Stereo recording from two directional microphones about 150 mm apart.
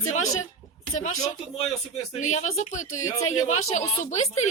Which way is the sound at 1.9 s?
50° left (ahead or behind).